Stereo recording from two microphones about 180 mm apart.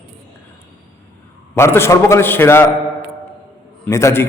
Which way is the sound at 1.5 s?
15° left (ahead or behind).